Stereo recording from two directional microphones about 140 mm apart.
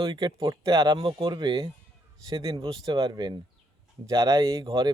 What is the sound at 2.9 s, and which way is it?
Speech, 35° right (ahead or behind).